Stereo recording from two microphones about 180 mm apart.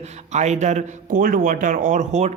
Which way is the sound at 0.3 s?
40° right (ahead or behind).